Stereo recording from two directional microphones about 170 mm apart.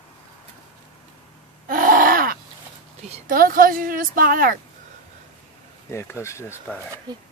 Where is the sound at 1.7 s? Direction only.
55° right (ahead or behind).